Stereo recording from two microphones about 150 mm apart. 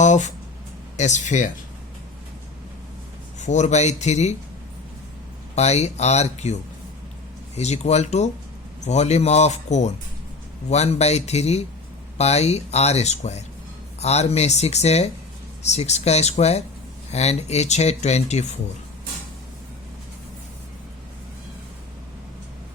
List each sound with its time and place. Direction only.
0.0 s speech: 55° left (ahead or behind)
3.4 s speech: 50° left (ahead or behind)
5.5 s speech: 45° left (ahead or behind)